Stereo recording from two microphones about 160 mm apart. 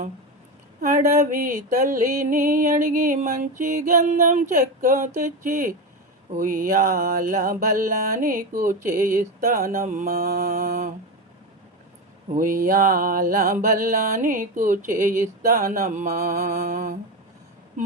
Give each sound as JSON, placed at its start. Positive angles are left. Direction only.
{"t": 0.8, "sound": "mantra", "side_deg": -60}
{"t": 10.1, "sound": "mantra", "side_deg": -75}
{"t": 10.4, "sound": "mantra", "side_deg": -60}
{"t": 12.3, "sound": "mantra", "side_deg": -60}
{"t": 16.6, "sound": "mantra", "side_deg": -55}